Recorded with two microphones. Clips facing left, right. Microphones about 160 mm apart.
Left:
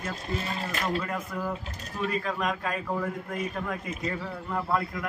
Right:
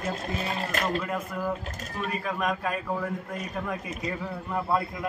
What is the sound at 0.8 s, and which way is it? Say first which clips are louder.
A man's voice: right 1 dB; 5° right (ahead or behind).